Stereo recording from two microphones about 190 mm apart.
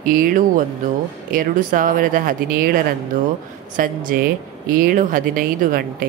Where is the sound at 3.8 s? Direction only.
45° right (ahead or behind).